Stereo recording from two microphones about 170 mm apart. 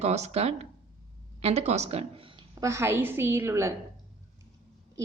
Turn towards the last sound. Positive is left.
turn(degrees=-15)  # may be behind; listen again after turning